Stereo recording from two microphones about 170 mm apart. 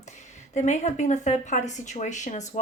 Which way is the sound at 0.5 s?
45° left (ahead or behind).